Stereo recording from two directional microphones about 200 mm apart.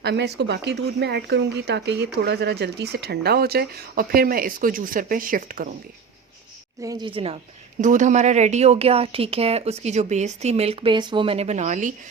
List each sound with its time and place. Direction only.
0.0 s speech: 55° right (ahead or behind)
6.8 s speech: 20° right (ahead or behind)
7.8 s speech: 40° right (ahead or behind)